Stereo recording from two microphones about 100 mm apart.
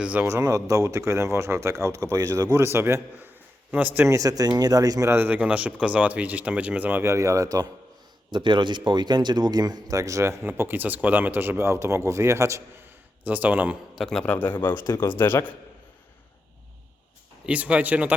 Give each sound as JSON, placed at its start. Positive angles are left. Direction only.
{"t": 0.0, "sound": "speech", "side_deg": -15}
{"t": 0.3, "sound": "speech", "side_deg": -30}
{"t": 2.6, "sound": "a man's voice", "side_deg": -25}
{"t": 4.1, "sound": "speech", "side_deg": -35}
{"t": 5.1, "sound": "speech", "side_deg": -20}
{"t": 7.0, "sound": "speech", "side_deg": -30}
{"t": 8.3, "sound": "speech", "side_deg": -50}
{"t": 13.2, "sound": "speech", "side_deg": -15}
{"t": 13.9, "sound": "a man's voice", "side_deg": 5}
{"t": 17.4, "sound": "speech", "side_deg": -10}